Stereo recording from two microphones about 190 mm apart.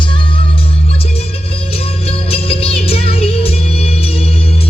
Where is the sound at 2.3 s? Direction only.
30° left (ahead or behind).